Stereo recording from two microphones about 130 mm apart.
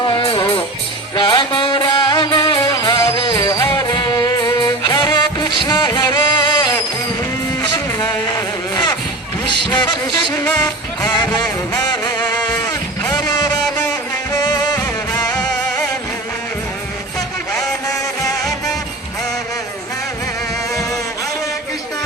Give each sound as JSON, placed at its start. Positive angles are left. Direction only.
{"t": 0.0, "sound": "music", "side_deg": 40}
{"t": 11.9, "sound": "music", "side_deg": 35}
{"t": 18.4, "sound": "music", "side_deg": 0}